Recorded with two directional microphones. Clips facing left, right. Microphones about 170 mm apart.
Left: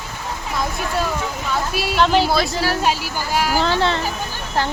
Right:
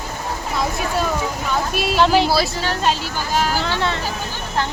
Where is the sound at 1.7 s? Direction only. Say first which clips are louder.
Right 1 dB; centre (ahead or behind).